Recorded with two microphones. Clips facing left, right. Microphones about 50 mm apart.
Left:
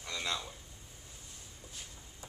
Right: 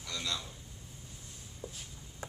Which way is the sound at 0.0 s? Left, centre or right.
Left.